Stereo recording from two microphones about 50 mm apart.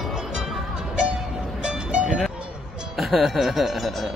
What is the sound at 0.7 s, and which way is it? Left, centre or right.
Music, centre.